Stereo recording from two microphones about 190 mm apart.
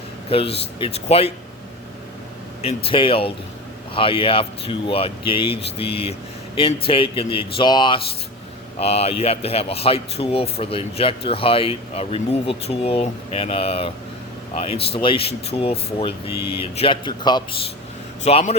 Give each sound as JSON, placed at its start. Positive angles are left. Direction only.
{"t": 0.3, "sound": "speech", "side_deg": 30}
{"t": 2.6, "sound": "speech", "side_deg": 30}
{"t": 18.2, "sound": "speech", "side_deg": 35}